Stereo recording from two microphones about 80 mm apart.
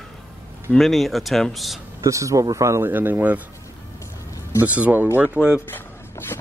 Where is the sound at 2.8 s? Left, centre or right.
Right.